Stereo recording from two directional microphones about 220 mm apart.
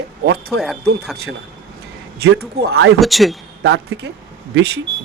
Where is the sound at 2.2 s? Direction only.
45° right (ahead or behind).